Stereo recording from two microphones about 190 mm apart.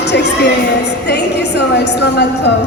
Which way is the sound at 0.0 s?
60° left (ahead or behind).